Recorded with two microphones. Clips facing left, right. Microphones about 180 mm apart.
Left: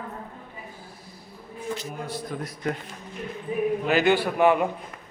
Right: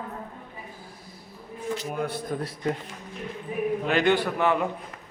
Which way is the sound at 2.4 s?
25° right (ahead or behind).